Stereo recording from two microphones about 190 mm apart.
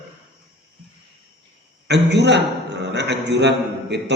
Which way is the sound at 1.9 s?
65° right (ahead or behind).